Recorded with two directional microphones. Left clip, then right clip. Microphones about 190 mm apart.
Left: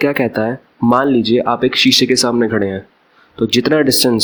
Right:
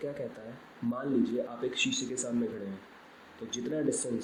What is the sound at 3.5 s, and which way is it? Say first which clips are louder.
Speech: left 19 dB; 55° left (ahead or behind).